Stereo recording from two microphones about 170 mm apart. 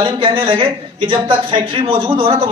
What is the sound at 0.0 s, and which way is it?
A man's voice, 30° right (ahead or behind).